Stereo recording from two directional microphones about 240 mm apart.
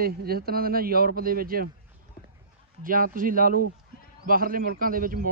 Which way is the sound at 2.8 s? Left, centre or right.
Right.